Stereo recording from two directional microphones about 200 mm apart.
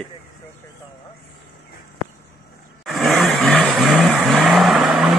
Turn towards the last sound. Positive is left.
turn(degrees=0)  # may be behind; listen again after turning